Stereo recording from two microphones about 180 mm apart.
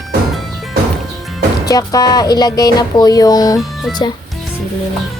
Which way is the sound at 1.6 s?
20° left (ahead or behind).